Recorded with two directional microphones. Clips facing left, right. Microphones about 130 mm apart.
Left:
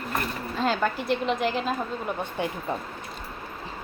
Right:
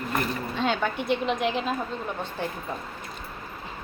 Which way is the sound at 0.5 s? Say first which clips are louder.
Left 2 dB; centre (ahead or behind).